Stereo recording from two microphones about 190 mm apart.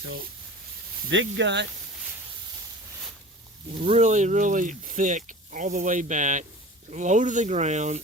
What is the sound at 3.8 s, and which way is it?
Speech, 35° right (ahead or behind).